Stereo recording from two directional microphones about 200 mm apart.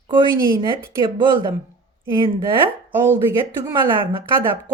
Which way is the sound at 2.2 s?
25° right (ahead or behind).